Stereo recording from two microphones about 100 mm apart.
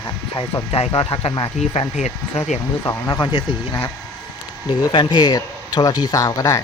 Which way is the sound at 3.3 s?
60° left (ahead or behind).